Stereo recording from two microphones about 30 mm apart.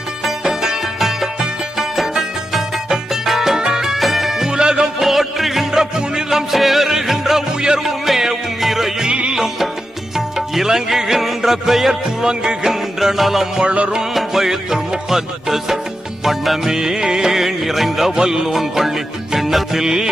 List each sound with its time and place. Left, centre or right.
0.3 s music: centre
2.9 s music: centre
4.5 s music: right
4.9 s music: centre
5.7 s music: centre
6.5 s music: centre
9.0 s music: right
9.3 s music: centre
12.2 s music: right
12.6 s music: centre
14.4 s music: centre
16.6 s music: centre
17.3 s music: centre
18.2 s music: centre